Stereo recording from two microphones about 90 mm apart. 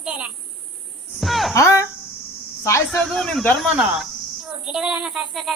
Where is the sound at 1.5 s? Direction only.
35° left (ahead or behind).